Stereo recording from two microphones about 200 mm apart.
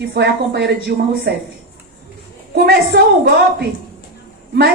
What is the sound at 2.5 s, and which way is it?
Speech, 55° right (ahead or behind).